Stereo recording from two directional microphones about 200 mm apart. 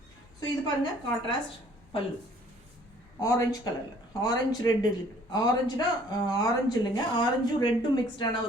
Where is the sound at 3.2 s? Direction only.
15° left (ahead or behind).